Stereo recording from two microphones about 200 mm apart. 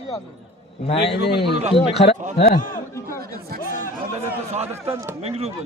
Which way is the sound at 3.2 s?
50° right (ahead or behind).